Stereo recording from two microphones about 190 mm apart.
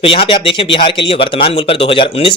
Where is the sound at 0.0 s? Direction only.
30° left (ahead or behind).